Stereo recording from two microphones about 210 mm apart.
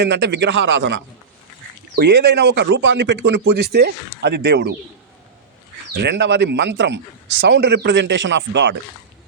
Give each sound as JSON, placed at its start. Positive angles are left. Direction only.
{"t": 0.0, "sound": "speech", "side_deg": -55}
{"t": 5.9, "sound": "speech", "side_deg": -55}